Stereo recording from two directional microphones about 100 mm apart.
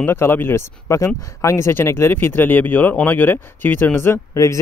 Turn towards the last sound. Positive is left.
turn(degrees=35)  # may be behind; listen again after turning